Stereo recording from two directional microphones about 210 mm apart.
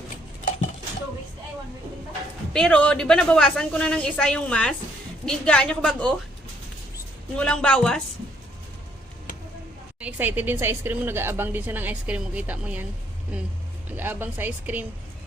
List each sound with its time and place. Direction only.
2.5 s a woman's voice: 5° left (ahead or behind)
7.3 s a woman's voice: 5° left (ahead or behind)
10.0 s speech: 5° right (ahead or behind)
13.9 s speech: 10° right (ahead or behind)